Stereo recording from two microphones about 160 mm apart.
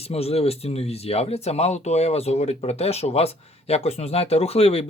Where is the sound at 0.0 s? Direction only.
40° left (ahead or behind).